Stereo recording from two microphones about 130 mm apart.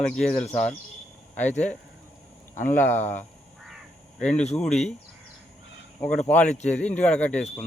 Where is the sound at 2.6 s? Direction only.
75° left (ahead or behind).